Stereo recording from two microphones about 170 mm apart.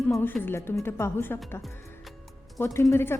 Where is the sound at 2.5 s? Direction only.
20° left (ahead or behind).